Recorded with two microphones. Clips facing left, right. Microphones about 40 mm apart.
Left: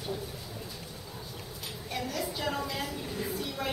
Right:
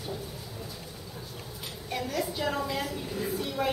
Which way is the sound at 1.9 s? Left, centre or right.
Centre.